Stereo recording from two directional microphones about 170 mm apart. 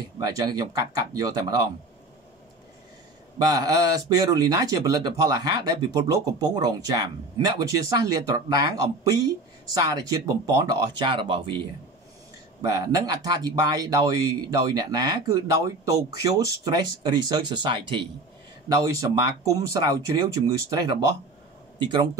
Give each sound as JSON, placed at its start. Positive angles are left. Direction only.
{"t": 0.2, "sound": "speech", "side_deg": -20}
{"t": 3.3, "sound": "speech", "side_deg": -20}
{"t": 12.6, "sound": "speech", "side_deg": -20}
{"t": 21.7, "sound": "speech", "side_deg": -25}